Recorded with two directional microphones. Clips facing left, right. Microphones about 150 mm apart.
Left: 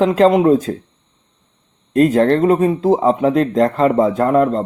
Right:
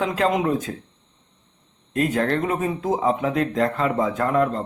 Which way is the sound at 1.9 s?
35° left (ahead or behind).